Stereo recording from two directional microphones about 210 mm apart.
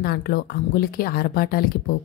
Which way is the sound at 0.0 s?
45° left (ahead or behind).